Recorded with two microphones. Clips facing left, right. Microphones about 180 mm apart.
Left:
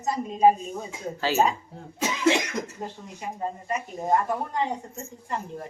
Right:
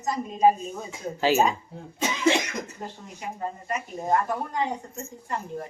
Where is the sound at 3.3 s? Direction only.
20° left (ahead or behind).